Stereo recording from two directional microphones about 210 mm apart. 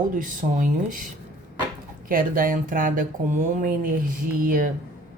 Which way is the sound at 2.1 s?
40° right (ahead or behind).